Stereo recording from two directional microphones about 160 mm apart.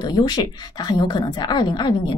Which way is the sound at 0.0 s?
25° left (ahead or behind).